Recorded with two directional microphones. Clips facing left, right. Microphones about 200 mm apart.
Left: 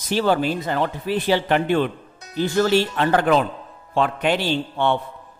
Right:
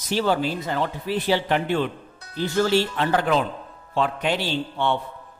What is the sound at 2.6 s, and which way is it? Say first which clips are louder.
Speech: left 2 dB; 55° left (ahead or behind).